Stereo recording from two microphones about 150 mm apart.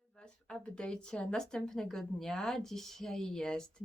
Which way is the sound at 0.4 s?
5° left (ahead or behind).